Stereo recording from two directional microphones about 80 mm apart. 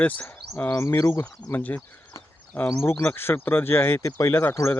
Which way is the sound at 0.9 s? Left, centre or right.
Left.